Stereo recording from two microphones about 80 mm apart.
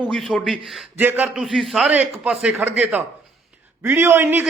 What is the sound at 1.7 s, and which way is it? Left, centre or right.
Speech, centre.